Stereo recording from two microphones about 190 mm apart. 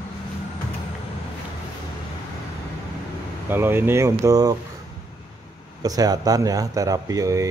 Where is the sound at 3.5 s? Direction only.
10° right (ahead or behind).